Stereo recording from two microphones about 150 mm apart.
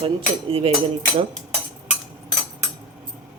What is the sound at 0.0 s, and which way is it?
Speech, 40° right (ahead or behind).